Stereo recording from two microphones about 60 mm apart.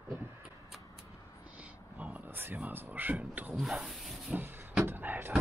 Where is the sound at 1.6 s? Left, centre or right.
Right.